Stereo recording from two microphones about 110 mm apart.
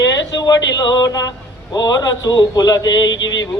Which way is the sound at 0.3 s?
40° left (ahead or behind).